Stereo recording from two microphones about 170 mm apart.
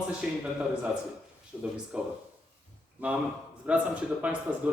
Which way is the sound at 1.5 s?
5° right (ahead or behind).